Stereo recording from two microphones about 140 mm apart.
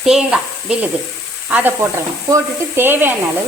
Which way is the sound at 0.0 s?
5° right (ahead or behind).